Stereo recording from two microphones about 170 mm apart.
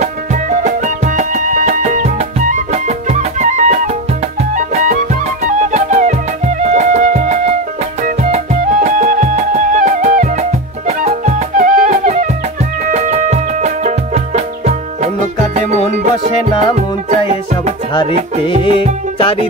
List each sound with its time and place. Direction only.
0.0 s music: 45° right (ahead or behind)